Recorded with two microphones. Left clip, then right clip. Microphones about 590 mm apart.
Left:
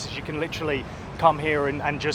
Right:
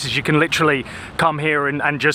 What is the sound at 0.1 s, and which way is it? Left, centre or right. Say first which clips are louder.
Speech: right 15 dB; right.